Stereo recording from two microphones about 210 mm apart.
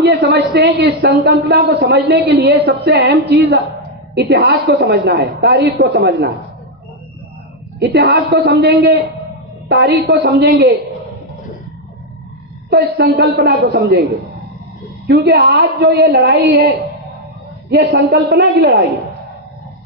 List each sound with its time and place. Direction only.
0.0 s a man's voice: 50° right (ahead or behind)
7.8 s a man's voice: 50° right (ahead or behind)
12.6 s a man's voice: 50° right (ahead or behind)
15.0 s a man's voice: 50° right (ahead or behind)